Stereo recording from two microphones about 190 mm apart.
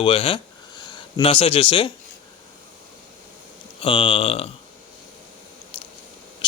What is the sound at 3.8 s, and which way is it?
Speech, 30° left (ahead or behind).